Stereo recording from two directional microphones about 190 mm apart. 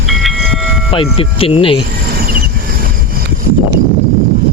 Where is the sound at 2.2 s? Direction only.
55° right (ahead or behind).